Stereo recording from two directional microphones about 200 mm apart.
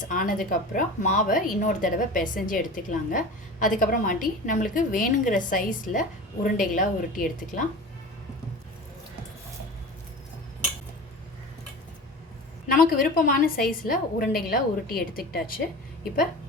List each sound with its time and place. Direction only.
0.0 s a woman's voice: 45° left (ahead or behind)
12.6 s a woman's voice: 45° left (ahead or behind)